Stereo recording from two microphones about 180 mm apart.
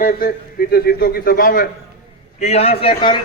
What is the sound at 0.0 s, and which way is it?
A man's voice, 55° left (ahead or behind).